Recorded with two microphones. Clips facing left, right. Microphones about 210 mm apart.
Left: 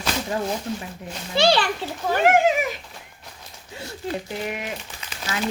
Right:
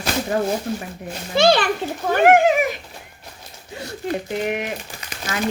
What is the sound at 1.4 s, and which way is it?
A child's voice, 55° right (ahead or behind).